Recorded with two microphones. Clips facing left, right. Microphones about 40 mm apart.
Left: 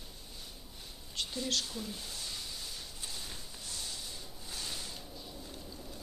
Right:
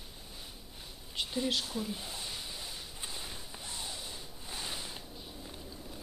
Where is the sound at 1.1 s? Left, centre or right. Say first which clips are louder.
Right 3 dB; centre.